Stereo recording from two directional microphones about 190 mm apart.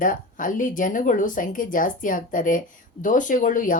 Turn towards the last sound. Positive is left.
turn(degrees=45)  # may be behind; listen again after turning